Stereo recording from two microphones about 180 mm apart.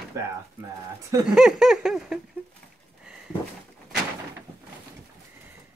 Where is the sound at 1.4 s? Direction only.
5° right (ahead or behind).